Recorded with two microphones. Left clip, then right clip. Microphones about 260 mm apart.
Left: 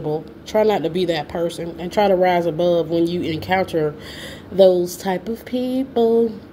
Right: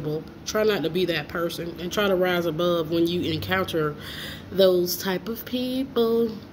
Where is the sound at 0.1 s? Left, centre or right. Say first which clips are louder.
Left 7 dB; left.